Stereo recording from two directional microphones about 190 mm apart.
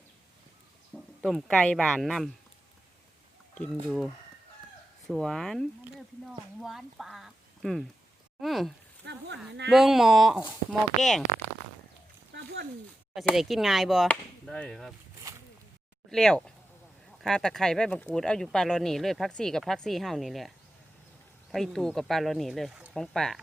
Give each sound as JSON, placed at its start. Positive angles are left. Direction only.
{"t": 0.9, "sound": "speech", "side_deg": 0}
{"t": 3.5, "sound": "speech", "side_deg": 5}
{"t": 9.0, "sound": "speech", "side_deg": -65}
{"t": 9.6, "sound": "speech", "side_deg": 0}
{"t": 12.3, "sound": "a sound", "side_deg": -60}
{"t": 13.1, "sound": "speech", "side_deg": 0}
{"t": 16.0, "sound": "speech", "side_deg": 0}
{"t": 21.5, "sound": "speech", "side_deg": 0}